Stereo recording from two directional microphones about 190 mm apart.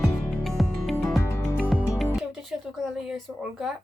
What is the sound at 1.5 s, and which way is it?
Music, centre (ahead or behind).